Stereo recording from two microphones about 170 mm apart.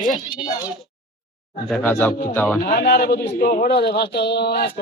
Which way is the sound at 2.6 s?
65° left (ahead or behind).